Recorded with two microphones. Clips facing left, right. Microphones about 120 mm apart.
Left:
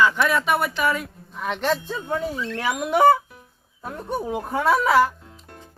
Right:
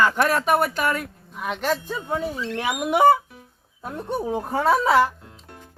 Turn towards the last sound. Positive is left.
turn(degrees=-25)  # may be behind; listen again after turning